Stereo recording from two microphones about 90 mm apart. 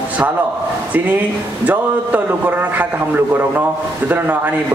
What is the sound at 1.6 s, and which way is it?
Speech, 20° right (ahead or behind).